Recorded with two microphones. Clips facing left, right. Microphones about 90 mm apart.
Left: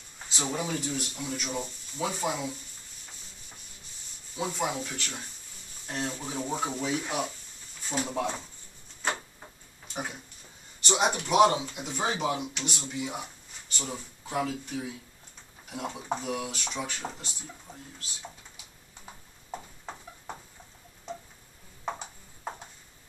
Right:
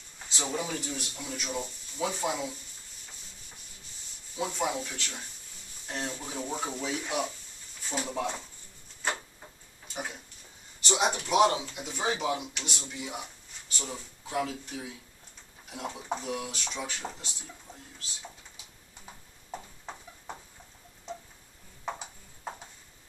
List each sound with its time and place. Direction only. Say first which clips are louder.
0.3 s speech: left 1 dB; 10° left (ahead or behind)
4.4 s speech: even; 5° left (ahead or behind)
9.9 s speech: left 2 dB; 5° left (ahead or behind)
19.5 s clip-clop: left 1 dB; 5° left (ahead or behind)
22.0 s a sound: left 2 dB; 10° left (ahead or behind)